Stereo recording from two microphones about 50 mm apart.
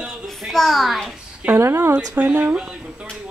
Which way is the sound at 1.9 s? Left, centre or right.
Right.